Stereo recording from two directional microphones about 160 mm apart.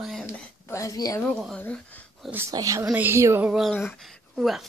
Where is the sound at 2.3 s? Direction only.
15° right (ahead or behind).